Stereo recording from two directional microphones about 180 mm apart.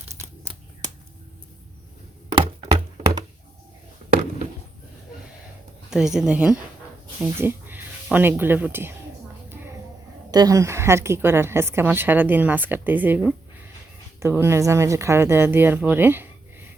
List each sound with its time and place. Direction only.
0.2 s a sound: 15° right (ahead or behind)
2.3 s thunk: 30° right (ahead or behind)
5.9 s speech: 5° right (ahead or behind)
10.3 s a woman's voice: 20° right (ahead or behind)